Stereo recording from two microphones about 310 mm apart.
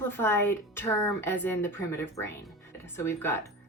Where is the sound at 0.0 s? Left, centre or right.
Centre.